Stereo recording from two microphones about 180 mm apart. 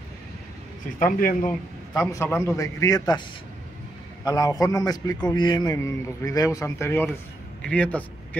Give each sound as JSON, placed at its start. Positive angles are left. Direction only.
{"t": 0.9, "sound": "speech", "side_deg": 45}
{"t": 2.0, "sound": "a man's voice", "side_deg": 20}
{"t": 4.2, "sound": "a man's voice", "side_deg": 20}